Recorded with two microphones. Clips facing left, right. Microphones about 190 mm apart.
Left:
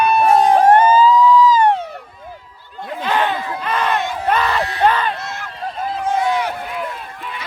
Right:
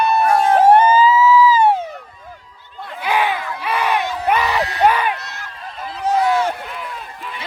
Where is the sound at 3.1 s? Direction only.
10° right (ahead or behind).